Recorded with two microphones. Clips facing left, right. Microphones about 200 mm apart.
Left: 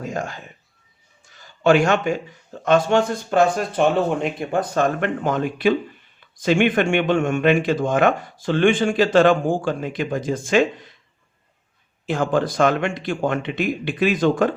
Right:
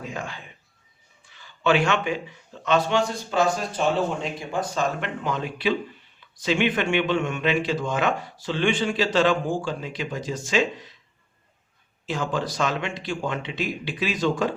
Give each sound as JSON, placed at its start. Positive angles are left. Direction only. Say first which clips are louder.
{"t": 0.0, "sound": "a man's voice", "louder": "left 6 dB", "side_deg": 45}
{"t": 12.0, "sound": "a man's voice", "louder": "left 6 dB", "side_deg": 55}